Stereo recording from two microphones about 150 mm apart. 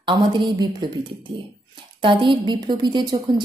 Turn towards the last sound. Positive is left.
turn(degrees=-30)  # may be behind; listen again after turning